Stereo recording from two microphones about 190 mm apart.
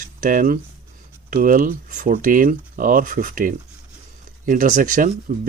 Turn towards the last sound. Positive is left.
turn(degrees=-45)  # may be behind; listen again after turning